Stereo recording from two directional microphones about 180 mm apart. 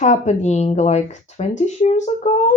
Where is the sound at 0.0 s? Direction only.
40° left (ahead or behind).